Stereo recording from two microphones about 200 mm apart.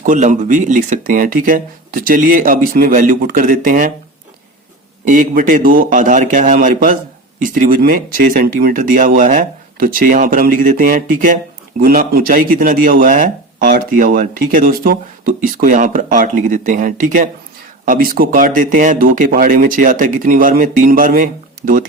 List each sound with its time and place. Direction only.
0.0 s speech: 40° right (ahead or behind)
5.0 s a man's voice: 40° right (ahead or behind)